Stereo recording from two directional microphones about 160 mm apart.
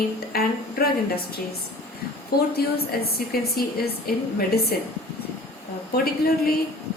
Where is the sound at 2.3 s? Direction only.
80° left.